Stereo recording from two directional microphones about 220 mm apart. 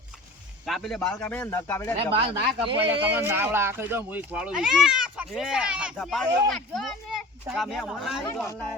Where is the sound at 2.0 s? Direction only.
25° right (ahead or behind).